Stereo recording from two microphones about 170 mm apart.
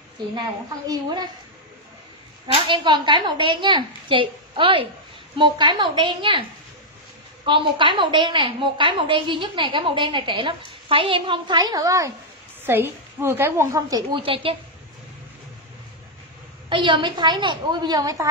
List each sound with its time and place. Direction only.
0.3 s a woman's voice: 25° right (ahead or behind)
2.4 s a woman's voice: 30° right (ahead or behind)
7.4 s a woman's voice: 30° right (ahead or behind)
16.6 s a woman's voice: 30° right (ahead or behind)